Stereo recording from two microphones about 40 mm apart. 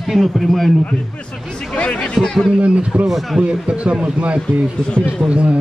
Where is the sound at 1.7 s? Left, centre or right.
Left.